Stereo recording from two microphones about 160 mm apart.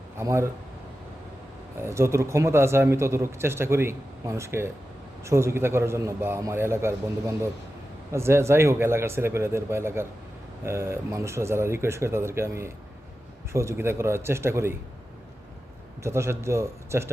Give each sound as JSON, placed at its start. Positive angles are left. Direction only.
{"t": 0.2, "sound": "a man's voice", "side_deg": -15}
{"t": 1.8, "sound": "a man's voice", "side_deg": -15}
{"t": 16.0, "sound": "a man's voice", "side_deg": -15}